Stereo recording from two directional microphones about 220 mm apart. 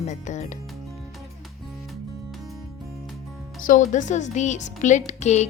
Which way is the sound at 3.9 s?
35° left (ahead or behind).